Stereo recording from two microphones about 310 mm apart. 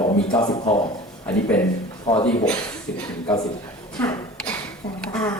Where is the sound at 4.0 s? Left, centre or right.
Centre.